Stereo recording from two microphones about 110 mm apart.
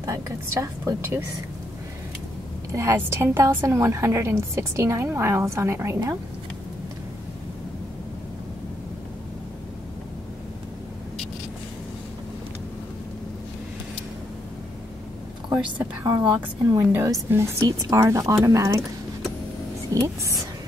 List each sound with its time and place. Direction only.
0.0 s a woman's voice: 30° right (ahead or behind)
2.7 s a woman's voice: 25° right (ahead or behind)
15.5 s a woman's voice: 20° right (ahead or behind)
19.9 s a woman's voice: 30° right (ahead or behind)